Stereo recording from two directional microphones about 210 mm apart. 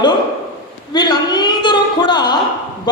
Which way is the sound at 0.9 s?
20° left (ahead or behind).